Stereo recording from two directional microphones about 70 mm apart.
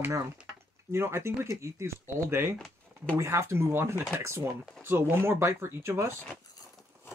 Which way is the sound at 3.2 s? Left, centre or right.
Right.